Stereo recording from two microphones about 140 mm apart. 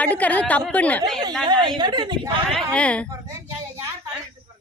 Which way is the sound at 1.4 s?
35° right (ahead or behind).